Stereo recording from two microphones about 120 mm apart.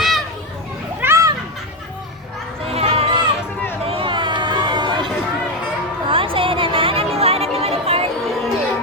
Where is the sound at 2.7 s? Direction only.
60° right (ahead or behind).